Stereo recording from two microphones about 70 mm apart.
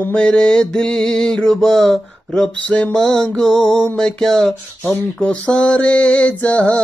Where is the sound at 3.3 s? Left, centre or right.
Centre.